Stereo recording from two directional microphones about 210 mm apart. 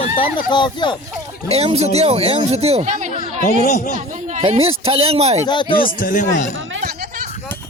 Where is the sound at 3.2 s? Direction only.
40° left (ahead or behind).